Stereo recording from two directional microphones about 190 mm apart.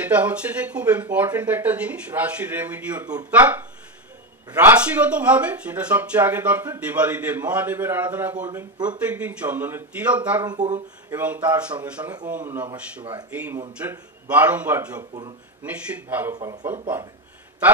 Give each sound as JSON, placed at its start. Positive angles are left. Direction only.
{"t": 0.0, "sound": "speech", "side_deg": -10}
{"t": 8.5, "sound": "speech", "side_deg": -20}
{"t": 8.8, "sound": "speech", "side_deg": -5}
{"t": 15.0, "sound": "speech", "side_deg": -20}
{"t": 15.6, "sound": "speech", "side_deg": -10}